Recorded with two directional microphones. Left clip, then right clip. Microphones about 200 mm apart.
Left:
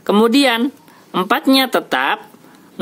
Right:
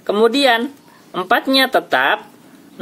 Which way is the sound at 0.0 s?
40° left (ahead or behind).